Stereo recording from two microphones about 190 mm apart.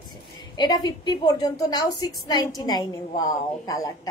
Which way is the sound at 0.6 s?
20° left (ahead or behind).